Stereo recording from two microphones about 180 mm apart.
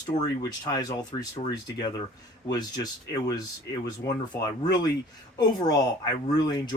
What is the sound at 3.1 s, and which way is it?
Speech, 20° left (ahead or behind).